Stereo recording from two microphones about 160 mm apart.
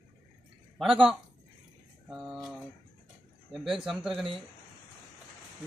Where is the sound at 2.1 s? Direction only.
Centre (ahead or behind).